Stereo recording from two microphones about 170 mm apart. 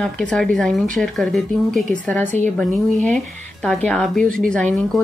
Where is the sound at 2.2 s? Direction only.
45° right (ahead or behind).